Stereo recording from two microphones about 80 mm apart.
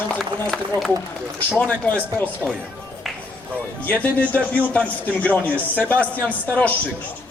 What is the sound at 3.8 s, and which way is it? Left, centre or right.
Speech, centre.